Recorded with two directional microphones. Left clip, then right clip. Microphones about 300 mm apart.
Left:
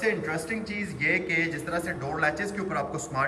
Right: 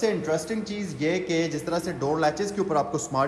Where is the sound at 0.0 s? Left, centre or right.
Centre.